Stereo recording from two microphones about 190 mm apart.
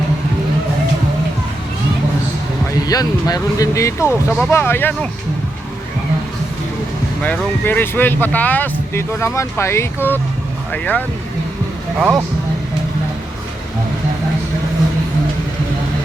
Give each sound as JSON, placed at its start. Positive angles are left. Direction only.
{"t": 2.8, "sound": "speech", "side_deg": 20}
{"t": 7.2, "sound": "speech", "side_deg": 10}
{"t": 11.9, "sound": "speech", "side_deg": -10}